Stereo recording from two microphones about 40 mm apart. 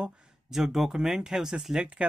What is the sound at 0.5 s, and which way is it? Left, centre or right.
Speech, centre.